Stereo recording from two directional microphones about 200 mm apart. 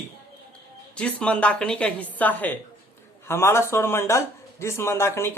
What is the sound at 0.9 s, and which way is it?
A woman's voice, 5° left (ahead or behind).